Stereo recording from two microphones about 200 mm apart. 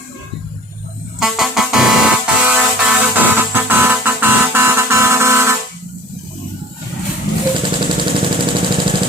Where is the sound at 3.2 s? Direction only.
10° right (ahead or behind).